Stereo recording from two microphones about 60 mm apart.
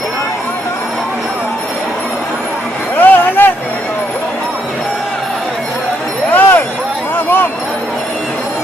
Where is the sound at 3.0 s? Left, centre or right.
Left.